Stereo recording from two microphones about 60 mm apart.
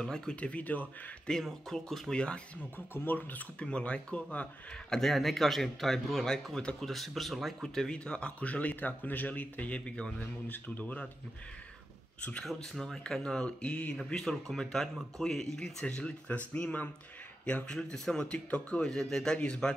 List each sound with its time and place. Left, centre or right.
0.0 s a man's voice: centre
0.4 s speech: left
1.2 s a man's voice: centre
2.1 s a man's voice: centre
2.9 s speech: left
3.5 s speech: centre
4.8 s a man's voice: centre
10.1 s speech: left
12.7 s a man's voice: centre
13.9 s a man's voice: centre
15.8 s a man's voice: left
17.8 s a man's voice: centre
18.9 s a man's voice: centre